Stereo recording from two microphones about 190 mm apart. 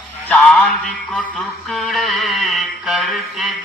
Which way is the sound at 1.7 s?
Centre (ahead or behind).